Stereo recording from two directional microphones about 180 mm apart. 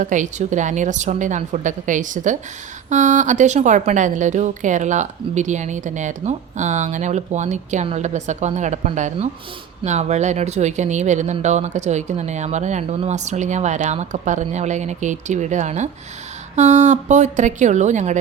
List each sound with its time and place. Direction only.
0.0 s a woman's voice: 45° right (ahead or behind)